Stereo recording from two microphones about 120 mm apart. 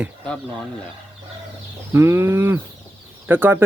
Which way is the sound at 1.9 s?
20° right (ahead or behind).